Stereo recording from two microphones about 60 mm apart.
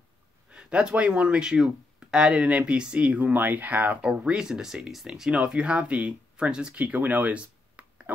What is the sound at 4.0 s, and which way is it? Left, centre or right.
Speech, centre.